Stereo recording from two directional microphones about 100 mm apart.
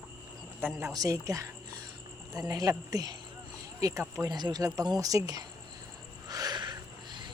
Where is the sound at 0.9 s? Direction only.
35° right (ahead or behind).